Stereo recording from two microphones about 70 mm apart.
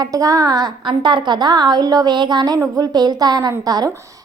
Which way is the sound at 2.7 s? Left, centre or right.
Right.